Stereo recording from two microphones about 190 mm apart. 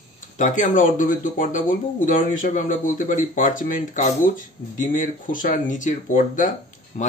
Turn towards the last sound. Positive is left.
turn(degrees=40)  # may be behind; listen again after turning